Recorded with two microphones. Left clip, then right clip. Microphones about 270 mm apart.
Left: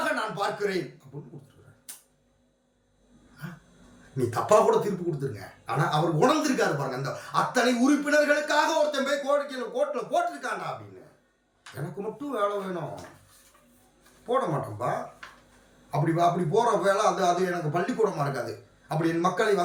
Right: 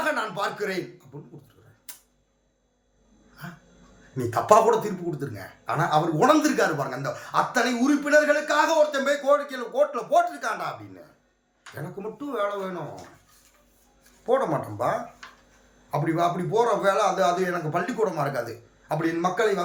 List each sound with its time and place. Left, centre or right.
0.0 s a sound: centre
1.9 s a sound: centre
3.4 s dog: centre
4.1 s speech: centre
12.1 s speech: centre
14.3 s speech: centre